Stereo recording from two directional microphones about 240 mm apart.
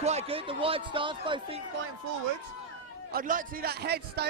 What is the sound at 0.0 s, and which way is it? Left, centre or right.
Speech, right.